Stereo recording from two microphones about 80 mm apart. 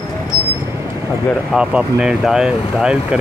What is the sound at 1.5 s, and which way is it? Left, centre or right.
Speech, centre.